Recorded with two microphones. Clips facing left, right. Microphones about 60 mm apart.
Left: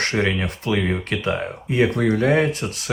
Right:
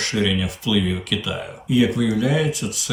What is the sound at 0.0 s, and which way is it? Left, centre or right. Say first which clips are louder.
Speech: left 1 dB; left.